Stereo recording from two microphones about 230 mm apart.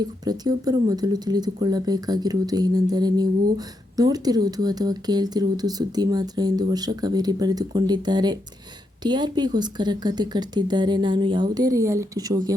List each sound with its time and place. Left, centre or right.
0.0 s speech: centre